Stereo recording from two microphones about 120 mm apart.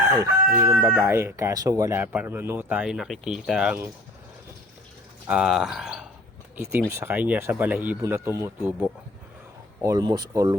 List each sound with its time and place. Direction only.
0.2 s chicken: 30° right (ahead or behind)
0.9 s a man's voice: 20° right (ahead or behind); by 3.8 s 5° right (ahead or behind)
5.3 s speech: 5° right (ahead or behind)
6.6 s a man's voice: 20° right (ahead or behind)
8.0 s chicken: 20° right (ahead or behind)
9.8 s speech: 30° right (ahead or behind)